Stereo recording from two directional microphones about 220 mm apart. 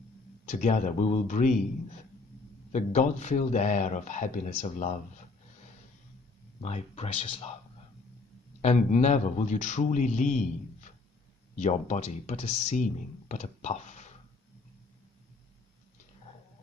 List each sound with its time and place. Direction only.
0.5 s a man's voice: 35° left (ahead or behind)
2.7 s a man's voice: 30° left (ahead or behind)
6.6 s speech: 25° left (ahead or behind)
8.5 s a man's voice: 30° left (ahead or behind)